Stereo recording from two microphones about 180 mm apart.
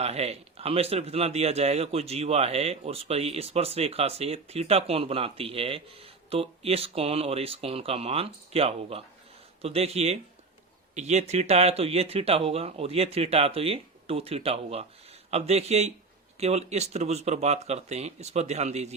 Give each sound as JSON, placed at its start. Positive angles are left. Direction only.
{"t": 0.0, "sound": "a man's voice", "side_deg": -35}